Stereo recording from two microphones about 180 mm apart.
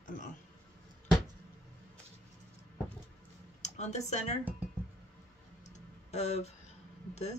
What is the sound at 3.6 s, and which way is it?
Speech, 40° left (ahead or behind).